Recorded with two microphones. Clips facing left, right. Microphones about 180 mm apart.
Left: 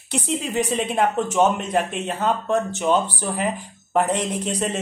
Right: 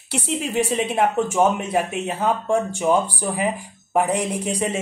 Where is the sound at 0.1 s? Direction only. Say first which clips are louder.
Even; 10° right (ahead or behind).